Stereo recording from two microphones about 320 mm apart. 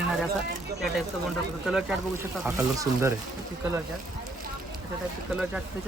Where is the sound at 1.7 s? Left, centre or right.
Centre.